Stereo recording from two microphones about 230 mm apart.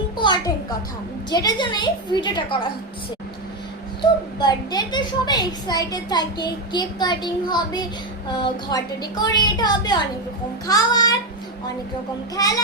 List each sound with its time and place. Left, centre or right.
0.2 s music: centre
1.3 s a woman's voice: centre
4.0 s a child's voice: centre
12.4 s a child's voice: centre